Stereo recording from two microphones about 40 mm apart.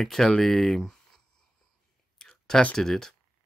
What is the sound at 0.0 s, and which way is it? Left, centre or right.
Speech, centre.